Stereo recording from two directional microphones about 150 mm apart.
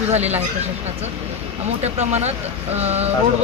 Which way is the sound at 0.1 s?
45° right (ahead or behind).